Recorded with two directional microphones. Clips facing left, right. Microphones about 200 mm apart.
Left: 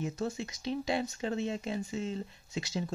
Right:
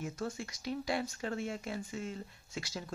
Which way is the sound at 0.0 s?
20° left (ahead or behind).